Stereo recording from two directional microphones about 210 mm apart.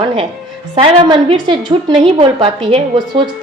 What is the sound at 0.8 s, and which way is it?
Speech, 25° right (ahead or behind).